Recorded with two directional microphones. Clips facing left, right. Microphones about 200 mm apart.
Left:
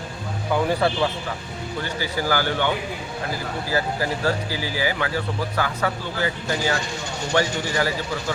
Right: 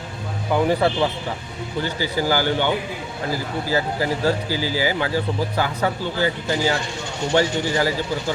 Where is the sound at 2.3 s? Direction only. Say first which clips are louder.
Right 2 dB; 25° right (ahead or behind).